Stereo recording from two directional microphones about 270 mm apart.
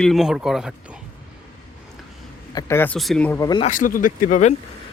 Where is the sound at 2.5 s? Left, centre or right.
Centre.